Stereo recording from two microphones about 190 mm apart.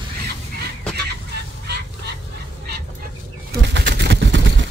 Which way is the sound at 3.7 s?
65° right (ahead or behind).